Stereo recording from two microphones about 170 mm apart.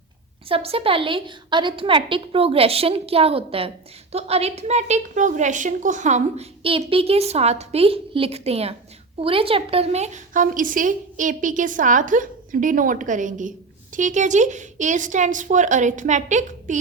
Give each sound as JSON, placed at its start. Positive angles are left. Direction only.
{"t": 0.4, "sound": "a woman's voice", "side_deg": -35}